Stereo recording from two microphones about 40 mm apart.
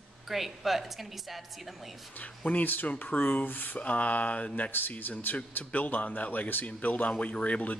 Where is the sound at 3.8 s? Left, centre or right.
Left.